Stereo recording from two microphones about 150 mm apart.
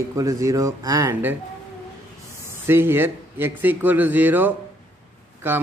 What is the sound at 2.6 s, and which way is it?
A man's voice, 15° right (ahead or behind).